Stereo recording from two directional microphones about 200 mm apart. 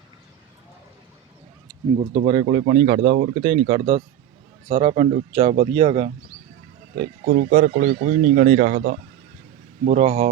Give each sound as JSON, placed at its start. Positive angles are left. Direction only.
{"t": 2.0, "sound": "speech", "side_deg": -25}
{"t": 7.3, "sound": "speech", "side_deg": -50}
{"t": 9.8, "sound": "speech", "side_deg": -35}